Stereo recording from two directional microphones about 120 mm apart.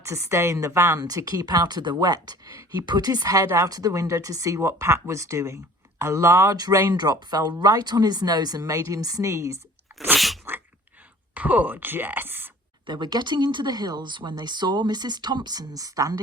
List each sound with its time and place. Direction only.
0.0 s a woman's voice: 25° right (ahead or behind)
10.2 s sneeze: centre (ahead or behind)
11.3 s speech: 15° right (ahead or behind)
12.8 s speech: 40° right (ahead or behind)